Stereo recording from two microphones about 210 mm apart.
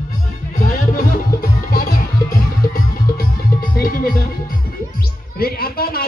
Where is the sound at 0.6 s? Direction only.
40° left (ahead or behind).